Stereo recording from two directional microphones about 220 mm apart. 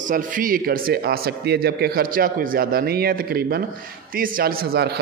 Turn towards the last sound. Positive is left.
turn(degrees=-45)  # may be behind; listen again after turning